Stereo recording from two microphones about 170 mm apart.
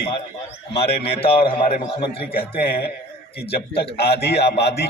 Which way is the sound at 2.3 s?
65° left (ahead or behind).